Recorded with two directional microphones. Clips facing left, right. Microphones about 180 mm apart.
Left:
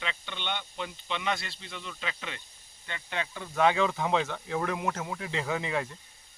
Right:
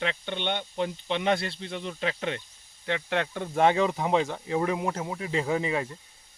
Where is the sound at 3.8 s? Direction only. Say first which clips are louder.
Right 3 dB; 25° right (ahead or behind).